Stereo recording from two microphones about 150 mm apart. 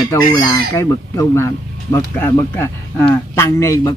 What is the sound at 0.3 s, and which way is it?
Speech, 20° left (ahead or behind).